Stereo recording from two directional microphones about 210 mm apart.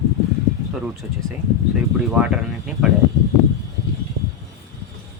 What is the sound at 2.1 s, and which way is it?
Speech, 5° right (ahead or behind).